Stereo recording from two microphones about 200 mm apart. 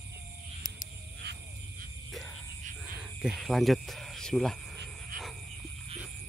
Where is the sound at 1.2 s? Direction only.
55° right (ahead or behind).